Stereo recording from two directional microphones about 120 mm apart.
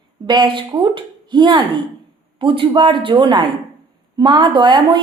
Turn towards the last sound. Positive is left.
turn(degrees=-40)  # may be behind; listen again after turning